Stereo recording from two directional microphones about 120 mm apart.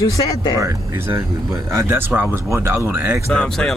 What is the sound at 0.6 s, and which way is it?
Speech, 25° right (ahead or behind).